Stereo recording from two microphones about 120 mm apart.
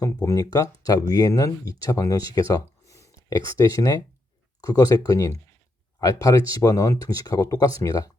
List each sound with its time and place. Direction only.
0.0 s speech: 25° left (ahead or behind)